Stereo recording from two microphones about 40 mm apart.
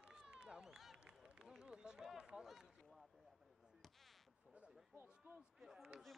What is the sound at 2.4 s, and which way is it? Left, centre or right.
Run, centre.